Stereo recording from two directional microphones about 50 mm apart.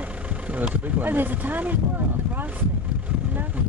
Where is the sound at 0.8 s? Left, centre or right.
Right.